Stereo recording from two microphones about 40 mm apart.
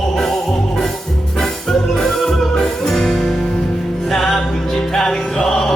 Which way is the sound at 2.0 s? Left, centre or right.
Centre.